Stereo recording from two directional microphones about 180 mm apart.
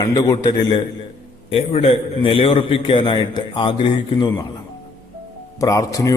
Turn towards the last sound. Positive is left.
turn(degrees=20)  # may be behind; listen again after turning